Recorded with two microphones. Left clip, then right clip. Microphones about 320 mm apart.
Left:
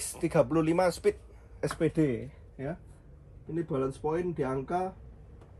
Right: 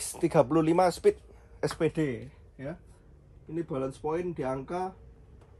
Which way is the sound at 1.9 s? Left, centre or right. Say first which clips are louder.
Left 2 dB; centre.